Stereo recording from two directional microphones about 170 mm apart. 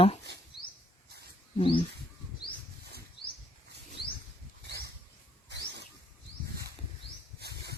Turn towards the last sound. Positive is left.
turn(degrees=-75)  # may be behind; listen again after turning